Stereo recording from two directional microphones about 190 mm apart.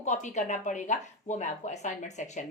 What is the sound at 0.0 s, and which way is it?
Speech, 40° left (ahead or behind).